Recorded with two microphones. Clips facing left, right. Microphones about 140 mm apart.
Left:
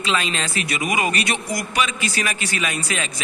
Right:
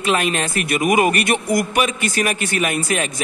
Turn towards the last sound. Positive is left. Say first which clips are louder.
# right 6 dB
turn(degrees=-50)  # may be behind; listen again after turning